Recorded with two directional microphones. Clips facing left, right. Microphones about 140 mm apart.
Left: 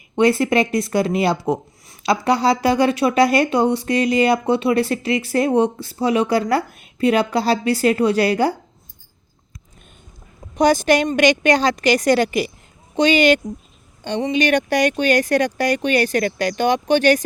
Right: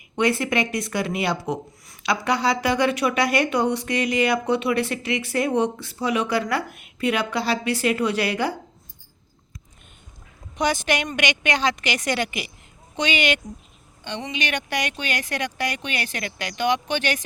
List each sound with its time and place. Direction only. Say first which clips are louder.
0.2 s speech: left 6 dB; 35° left (ahead or behind)
10.5 s speech: left 8 dB; 40° left (ahead or behind)